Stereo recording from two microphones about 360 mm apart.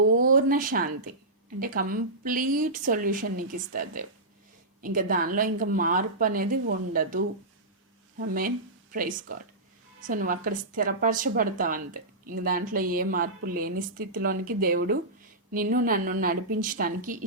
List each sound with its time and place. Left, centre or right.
0.2 s speech: right